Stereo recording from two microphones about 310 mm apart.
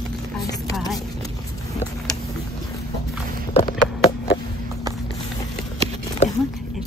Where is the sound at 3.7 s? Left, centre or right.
Left.